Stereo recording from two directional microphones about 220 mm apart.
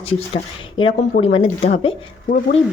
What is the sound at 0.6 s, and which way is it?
A woman's voice, 25° left (ahead or behind).